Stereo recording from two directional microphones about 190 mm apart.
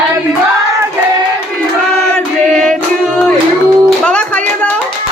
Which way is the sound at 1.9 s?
5° left (ahead or behind).